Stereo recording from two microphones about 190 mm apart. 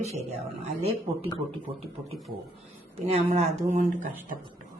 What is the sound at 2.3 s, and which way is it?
Speech, 50° right (ahead or behind).